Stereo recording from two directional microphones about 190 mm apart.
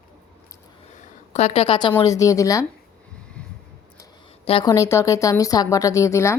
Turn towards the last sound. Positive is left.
turn(degrees=15)  # may be behind; listen again after turning